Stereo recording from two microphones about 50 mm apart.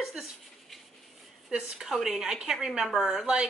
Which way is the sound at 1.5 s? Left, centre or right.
Centre.